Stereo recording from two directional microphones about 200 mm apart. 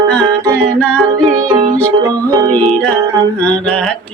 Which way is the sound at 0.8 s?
5° left (ahead or behind).